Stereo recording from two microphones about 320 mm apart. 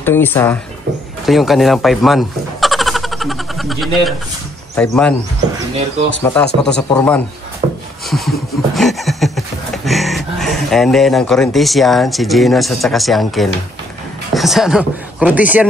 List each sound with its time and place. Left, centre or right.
0.0 s speech: centre
6.2 s speech: centre
7.6 s a sound: centre
8.1 s speech: centre